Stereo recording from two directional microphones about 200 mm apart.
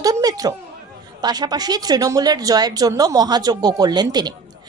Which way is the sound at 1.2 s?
20° right (ahead or behind).